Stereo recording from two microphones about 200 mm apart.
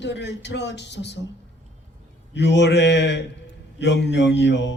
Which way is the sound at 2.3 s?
60° left (ahead or behind).